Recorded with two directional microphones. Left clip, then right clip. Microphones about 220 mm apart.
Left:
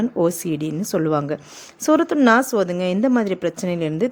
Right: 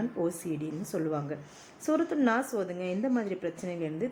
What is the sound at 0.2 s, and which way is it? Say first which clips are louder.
A woman's voice: left 13 dB; 45° left (ahead or behind).